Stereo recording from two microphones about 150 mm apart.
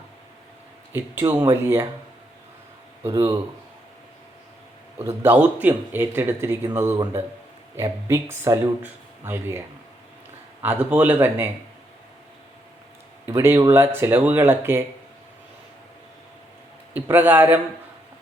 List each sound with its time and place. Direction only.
1.2 s speech: 15° right (ahead or behind)
3.0 s speech: 20° right (ahead or behind)
5.0 s speech: 15° right (ahead or behind)
13.2 s speech: 15° right (ahead or behind)
16.9 s speech: 10° right (ahead or behind)